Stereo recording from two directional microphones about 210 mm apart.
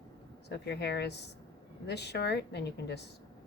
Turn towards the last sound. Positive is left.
turn(degrees=50)  # may be behind; listen again after turning